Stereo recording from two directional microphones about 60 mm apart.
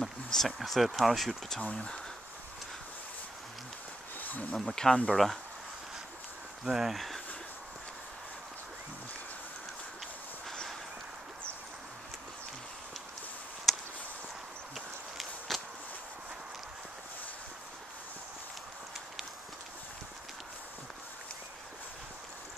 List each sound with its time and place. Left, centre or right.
0.0 s speech: centre
1.6 s speech: centre
4.2 s a sound: left
4.6 s speech: centre
6.6 s speech: centre
13.7 s a sound: centre
15.1 s walk: centre